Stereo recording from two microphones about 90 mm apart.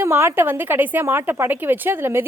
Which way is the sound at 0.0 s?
30° right (ahead or behind).